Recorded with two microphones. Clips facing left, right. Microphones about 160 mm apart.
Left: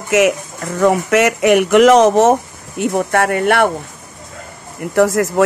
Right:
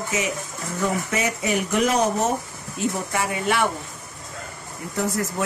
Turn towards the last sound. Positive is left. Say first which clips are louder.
# left 12 dB
turn(degrees=85)